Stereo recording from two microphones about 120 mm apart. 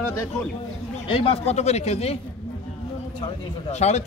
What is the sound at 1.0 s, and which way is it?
Speech, 50° left (ahead or behind).